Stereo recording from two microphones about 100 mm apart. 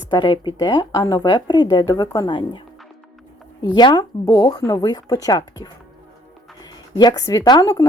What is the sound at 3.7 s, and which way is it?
Speech, 45° left (ahead or behind).